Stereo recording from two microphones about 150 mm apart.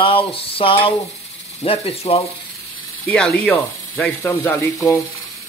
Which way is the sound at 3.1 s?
10° left (ahead or behind).